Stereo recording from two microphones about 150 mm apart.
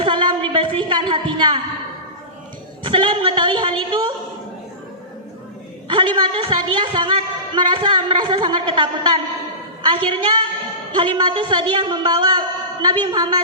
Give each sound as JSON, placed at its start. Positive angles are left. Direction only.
{"t": 0.0, "sound": "a sound", "side_deg": -30}
{"t": 2.8, "sound": "a woman's voice", "side_deg": -35}
{"t": 5.9, "sound": "a woman's voice", "side_deg": -35}